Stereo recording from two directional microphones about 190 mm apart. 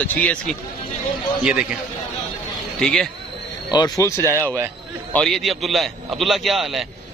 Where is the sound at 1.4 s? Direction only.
5° right (ahead or behind).